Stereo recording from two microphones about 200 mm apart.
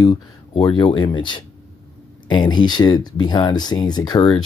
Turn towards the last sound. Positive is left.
turn(degrees=20)  # may be behind; listen again after turning